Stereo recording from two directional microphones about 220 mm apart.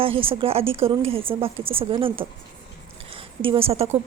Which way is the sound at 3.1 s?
25° right (ahead or behind).